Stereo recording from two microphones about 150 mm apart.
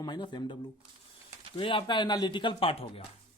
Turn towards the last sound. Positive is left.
turn(degrees=40)  # may be behind; listen again after turning